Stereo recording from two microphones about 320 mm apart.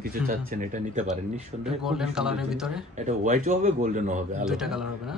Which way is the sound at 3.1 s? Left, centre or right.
Right.